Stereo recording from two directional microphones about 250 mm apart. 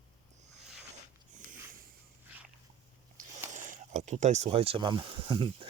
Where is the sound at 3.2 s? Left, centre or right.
Right.